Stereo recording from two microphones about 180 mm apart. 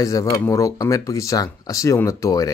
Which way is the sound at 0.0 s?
20° left (ahead or behind).